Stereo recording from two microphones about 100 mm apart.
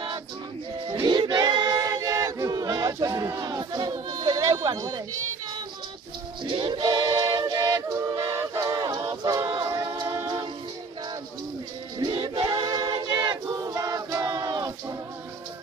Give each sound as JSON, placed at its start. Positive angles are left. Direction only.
{"t": 1.0, "sound": "choir", "side_deg": -50}
{"t": 2.9, "sound": "speech", "side_deg": -40}
{"t": 6.4, "sound": "music", "side_deg": -55}
{"t": 7.9, "sound": "a capella", "side_deg": -40}
{"t": 9.1, "sound": "choir", "side_deg": -45}
{"t": 9.5, "sound": "music", "side_deg": -50}
{"t": 12.0, "sound": "music", "side_deg": -50}
{"t": 12.6, "sound": "a capella", "side_deg": -40}
{"t": 12.9, "sound": "a sound", "side_deg": -45}